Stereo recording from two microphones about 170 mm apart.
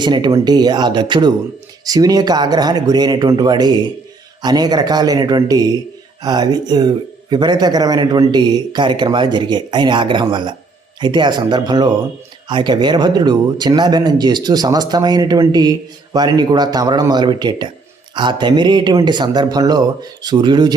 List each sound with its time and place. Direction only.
0.0 s speech: 25° right (ahead or behind)